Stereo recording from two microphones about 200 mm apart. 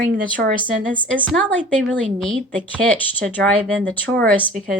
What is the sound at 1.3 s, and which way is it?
Speech, centre (ahead or behind).